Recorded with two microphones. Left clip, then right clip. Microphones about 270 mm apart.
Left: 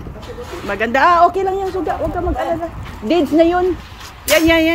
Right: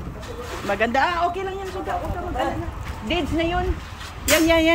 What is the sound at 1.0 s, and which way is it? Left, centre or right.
Speech, centre.